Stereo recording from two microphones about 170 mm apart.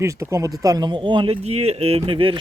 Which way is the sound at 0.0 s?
15° right (ahead or behind).